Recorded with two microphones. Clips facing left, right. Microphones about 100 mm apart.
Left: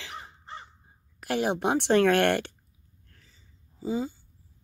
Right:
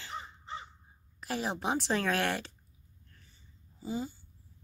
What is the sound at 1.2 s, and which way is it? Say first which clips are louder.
A woman's voice: left 8 dB; 65° left (ahead or behind).